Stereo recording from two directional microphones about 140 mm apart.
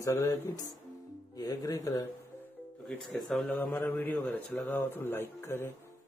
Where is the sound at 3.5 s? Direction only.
15° left (ahead or behind).